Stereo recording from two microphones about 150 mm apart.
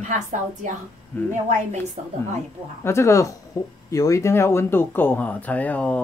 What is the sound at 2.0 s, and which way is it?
Speech, 50° right (ahead or behind).